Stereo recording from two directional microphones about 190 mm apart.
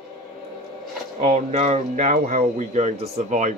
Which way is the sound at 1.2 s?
40° right (ahead or behind).